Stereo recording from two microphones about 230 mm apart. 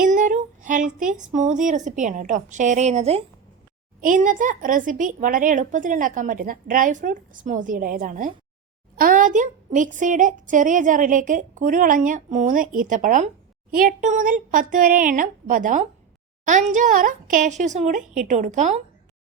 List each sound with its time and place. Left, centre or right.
0.0 s a woman's voice: right